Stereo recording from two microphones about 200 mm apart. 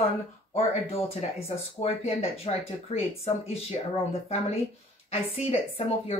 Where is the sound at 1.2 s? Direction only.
35° left (ahead or behind).